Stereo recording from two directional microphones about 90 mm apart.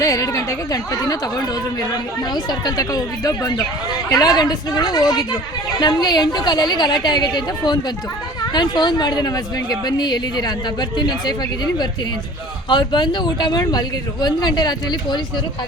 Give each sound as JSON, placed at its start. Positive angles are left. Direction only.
{"t": 0.0, "sound": "speech", "side_deg": 40}
{"t": 2.3, "sound": "speech", "side_deg": 50}